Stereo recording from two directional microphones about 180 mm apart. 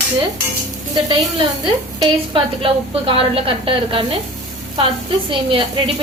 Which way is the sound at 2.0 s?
30° right (ahead or behind).